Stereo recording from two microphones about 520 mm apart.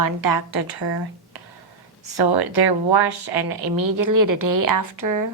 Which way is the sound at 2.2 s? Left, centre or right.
Right.